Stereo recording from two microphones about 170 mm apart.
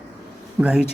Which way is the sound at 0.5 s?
5° right (ahead or behind).